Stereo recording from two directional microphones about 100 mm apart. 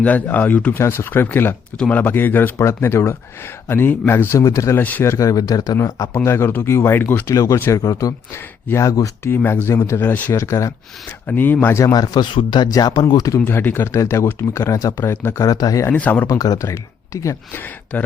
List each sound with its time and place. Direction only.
0.0 s speech: 15° left (ahead or behind); by 4.8 s 30° left (ahead or behind)
4.8 s speech: 15° left (ahead or behind)
5.0 s speech: 35° left (ahead or behind)
9.3 s speech: 20° left (ahead or behind)
11.3 s speech: 15° left (ahead or behind); by 13.4 s 40° left (ahead or behind)
13.4 s speech: 20° left (ahead or behind)
15.4 s speech: 40° left (ahead or behind)
15.9 s speech: 15° left (ahead or behind)
16.2 s speech: 35° left (ahead or behind)